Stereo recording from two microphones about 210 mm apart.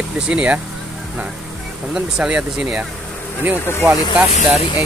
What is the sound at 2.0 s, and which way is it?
Speech, 5° right (ahead or behind).